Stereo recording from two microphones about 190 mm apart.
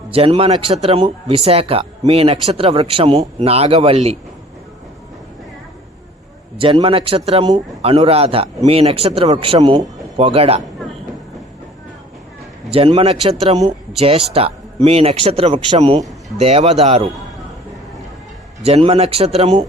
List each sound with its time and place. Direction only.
0.1 s a man's voice: 30° right (ahead or behind)
6.6 s a man's voice: 30° right (ahead or behind)
12.7 s speech: 30° right (ahead or behind)
18.6 s speech: 30° right (ahead or behind)